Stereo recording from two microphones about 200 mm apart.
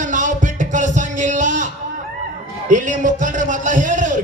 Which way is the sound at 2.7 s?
40° right (ahead or behind).